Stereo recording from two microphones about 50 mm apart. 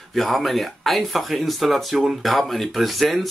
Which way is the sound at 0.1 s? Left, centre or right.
Centre.